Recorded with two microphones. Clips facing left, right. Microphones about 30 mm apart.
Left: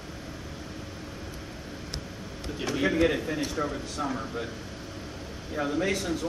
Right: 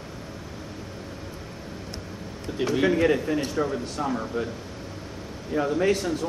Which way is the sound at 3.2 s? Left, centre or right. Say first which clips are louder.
Right 4 dB; centre.